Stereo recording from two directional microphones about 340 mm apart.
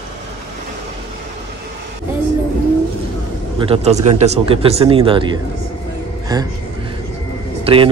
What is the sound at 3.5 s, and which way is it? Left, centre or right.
Speech, centre.